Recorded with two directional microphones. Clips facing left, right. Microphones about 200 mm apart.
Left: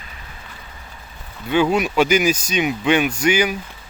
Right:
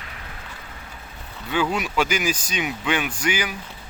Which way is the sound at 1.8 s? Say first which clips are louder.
Left 7 dB; 20° left (ahead or behind).